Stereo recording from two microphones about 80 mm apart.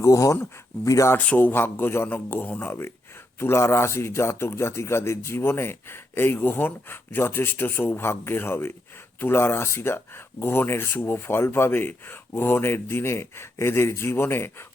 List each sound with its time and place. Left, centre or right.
0.0 s speech: left
1.4 s a man's voice: left
3.4 s a man's voice: left